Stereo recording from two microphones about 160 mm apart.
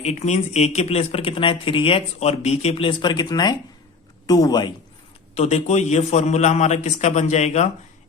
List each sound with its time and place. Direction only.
0.0 s a man's voice: 45° left (ahead or behind); by 4.7 s 25° left (ahead or behind)
5.3 s a man's voice: 40° left (ahead or behind)